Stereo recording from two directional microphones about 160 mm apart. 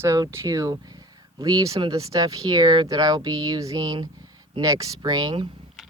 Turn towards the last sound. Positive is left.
turn(degrees=-25)  # may be behind; listen again after turning